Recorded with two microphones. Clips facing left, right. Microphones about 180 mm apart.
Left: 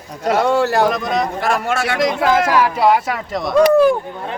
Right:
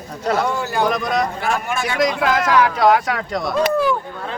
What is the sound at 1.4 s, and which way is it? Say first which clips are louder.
Speech: left 3 dB; 90° left.